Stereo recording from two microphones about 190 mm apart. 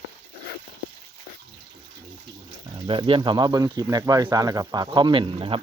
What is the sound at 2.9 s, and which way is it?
Speech, 25° right (ahead or behind).